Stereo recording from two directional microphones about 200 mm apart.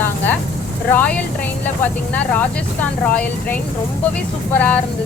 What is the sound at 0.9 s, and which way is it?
Speech, 5° left (ahead or behind).